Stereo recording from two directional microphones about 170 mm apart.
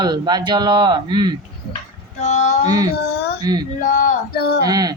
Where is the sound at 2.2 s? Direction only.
45° left (ahead or behind).